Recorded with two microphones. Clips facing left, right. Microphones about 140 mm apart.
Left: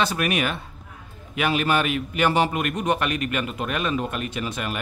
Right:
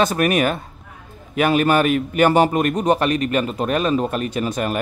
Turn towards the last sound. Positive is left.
turn(degrees=-40)  # may be behind; listen again after turning